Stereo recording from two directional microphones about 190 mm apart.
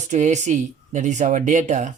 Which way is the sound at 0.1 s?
40° right (ahead or behind).